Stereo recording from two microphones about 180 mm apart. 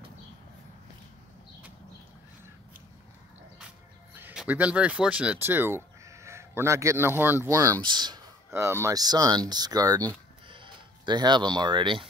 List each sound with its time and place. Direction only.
3.5 s speech: 5° right (ahead or behind); by 12.1 s 30° right (ahead or behind)